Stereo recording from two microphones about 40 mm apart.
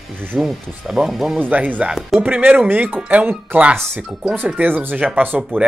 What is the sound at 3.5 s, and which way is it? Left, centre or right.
Speech, right.